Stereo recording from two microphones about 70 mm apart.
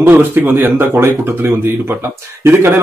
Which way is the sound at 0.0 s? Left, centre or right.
Right.